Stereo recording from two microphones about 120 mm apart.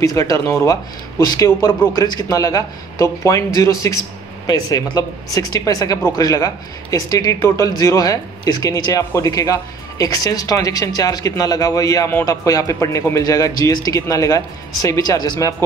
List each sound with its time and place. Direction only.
0.0 s speech: 30° left (ahead or behind)